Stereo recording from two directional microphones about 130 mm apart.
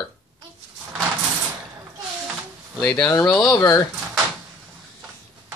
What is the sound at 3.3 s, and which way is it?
Speech, 5° left (ahead or behind).